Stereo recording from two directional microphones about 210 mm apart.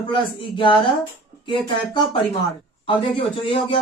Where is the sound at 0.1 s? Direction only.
20° left (ahead or behind).